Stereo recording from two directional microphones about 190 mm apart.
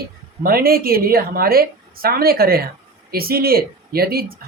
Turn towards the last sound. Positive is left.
turn(degrees=-55)  # may be behind; listen again after turning